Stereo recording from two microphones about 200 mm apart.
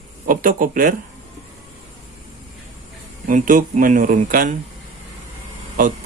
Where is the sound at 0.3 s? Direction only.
45° right (ahead or behind).